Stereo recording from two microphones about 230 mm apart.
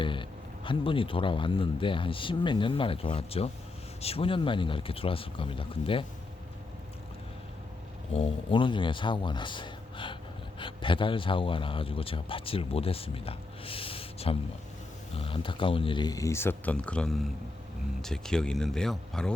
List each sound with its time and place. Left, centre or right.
0.0 s speech: left
8.1 s a man's voice: left; by 19.3 s centre